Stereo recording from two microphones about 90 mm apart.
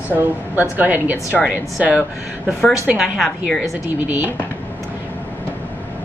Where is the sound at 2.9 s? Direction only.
Centre (ahead or behind).